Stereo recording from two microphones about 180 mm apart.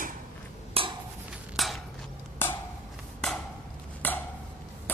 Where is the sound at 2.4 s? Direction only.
10° left (ahead or behind).